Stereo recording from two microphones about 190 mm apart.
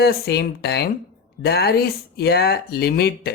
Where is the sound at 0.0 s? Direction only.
60° left (ahead or behind).